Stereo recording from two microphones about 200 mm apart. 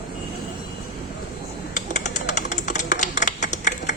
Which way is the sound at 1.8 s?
35° left (ahead or behind).